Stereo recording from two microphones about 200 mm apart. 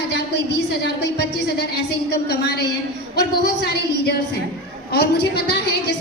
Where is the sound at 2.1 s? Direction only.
55° left (ahead or behind).